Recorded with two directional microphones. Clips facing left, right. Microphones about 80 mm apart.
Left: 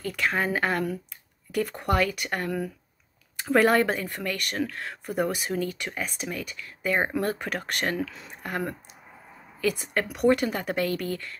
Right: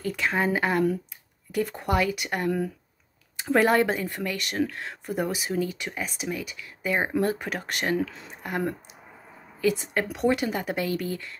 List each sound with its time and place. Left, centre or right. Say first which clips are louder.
0.0 s speech: right 1 dB; right
8.0 s speech: right 2 dB; right